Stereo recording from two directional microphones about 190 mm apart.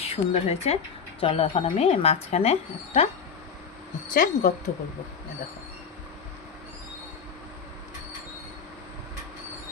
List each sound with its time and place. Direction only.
0.0 s speech: 30° left (ahead or behind)
4.1 s speech: 40° left (ahead or behind)